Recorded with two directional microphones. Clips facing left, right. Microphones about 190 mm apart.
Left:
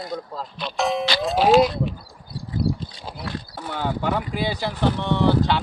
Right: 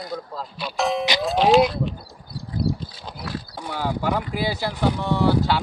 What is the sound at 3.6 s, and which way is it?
Speech, 10° right (ahead or behind).